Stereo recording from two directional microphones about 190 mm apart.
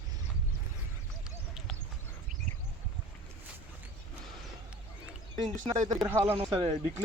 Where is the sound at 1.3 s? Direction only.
Centre (ahead or behind).